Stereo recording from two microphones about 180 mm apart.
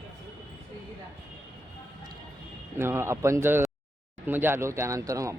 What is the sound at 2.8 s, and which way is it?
Speech, 15° right (ahead or behind).